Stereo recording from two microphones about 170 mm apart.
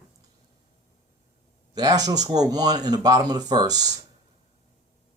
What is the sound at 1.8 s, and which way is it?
Speech, 20° right (ahead or behind).